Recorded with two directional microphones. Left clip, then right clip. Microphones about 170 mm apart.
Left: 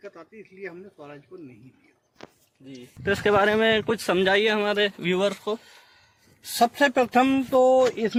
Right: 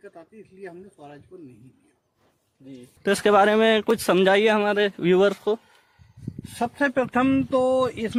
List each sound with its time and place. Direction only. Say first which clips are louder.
0.0 s speech: left 2 dB; 20° right (ahead or behind)
3.0 s speech: right 3 dB; 55° right (ahead or behind)
6.6 s speech: left 3 dB; 90° left
7.7 s speech: left 3 dB; 50° left (ahead or behind)